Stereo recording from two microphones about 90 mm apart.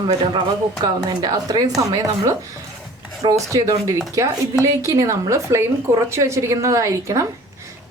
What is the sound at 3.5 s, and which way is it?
A woman's voice, 35° right (ahead or behind).